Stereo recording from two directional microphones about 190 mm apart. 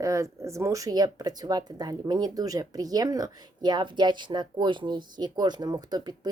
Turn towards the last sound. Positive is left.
turn(degrees=-20)  # may be behind; listen again after turning